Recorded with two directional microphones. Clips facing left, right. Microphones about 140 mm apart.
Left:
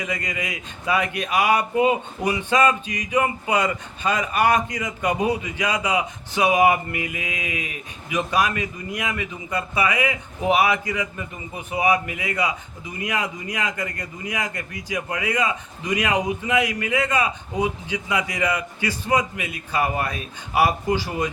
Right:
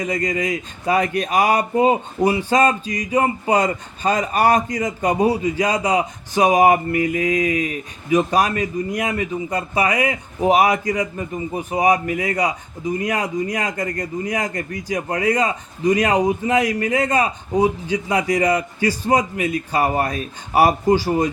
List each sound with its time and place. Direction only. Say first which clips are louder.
0.0 s a man's voice: right 7 dB; 40° right (ahead or behind)